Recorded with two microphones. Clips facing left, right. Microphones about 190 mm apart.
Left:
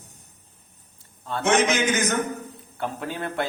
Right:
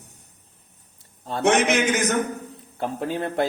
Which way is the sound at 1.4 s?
65° right (ahead or behind).